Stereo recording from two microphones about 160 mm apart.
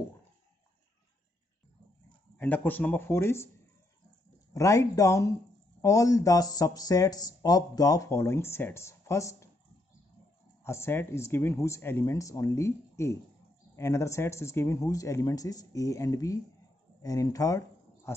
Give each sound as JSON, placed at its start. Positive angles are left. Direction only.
{"t": 2.3, "sound": "speech", "side_deg": 10}
{"t": 4.6, "sound": "speech", "side_deg": 20}
{"t": 10.6, "sound": "speech", "side_deg": 15}